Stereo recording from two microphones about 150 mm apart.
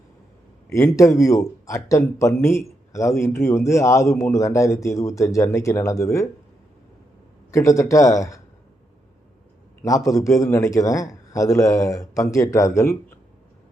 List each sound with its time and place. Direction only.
0.7 s a man's voice: 20° left (ahead or behind)
7.5 s a man's voice: 20° left (ahead or behind)
9.8 s a man's voice: 20° left (ahead or behind)